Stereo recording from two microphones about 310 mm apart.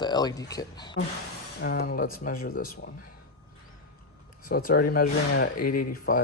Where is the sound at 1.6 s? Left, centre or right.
Left.